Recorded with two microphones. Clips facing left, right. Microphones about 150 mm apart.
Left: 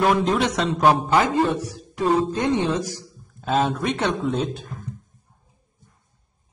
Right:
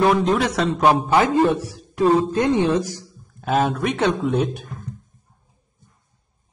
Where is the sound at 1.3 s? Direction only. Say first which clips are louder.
Right 3 dB; 15° right (ahead or behind).